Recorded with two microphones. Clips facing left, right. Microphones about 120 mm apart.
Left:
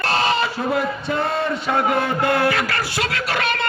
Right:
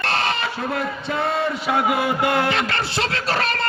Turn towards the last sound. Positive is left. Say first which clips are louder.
# even
turn(degrees=-35)  # may be behind; listen again after turning